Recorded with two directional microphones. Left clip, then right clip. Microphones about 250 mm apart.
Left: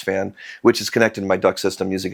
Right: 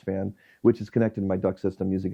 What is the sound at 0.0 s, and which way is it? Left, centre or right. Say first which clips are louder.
Speech: left 9 dB; centre.